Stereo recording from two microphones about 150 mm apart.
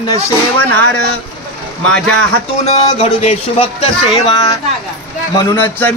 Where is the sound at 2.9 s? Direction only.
45° left (ahead or behind).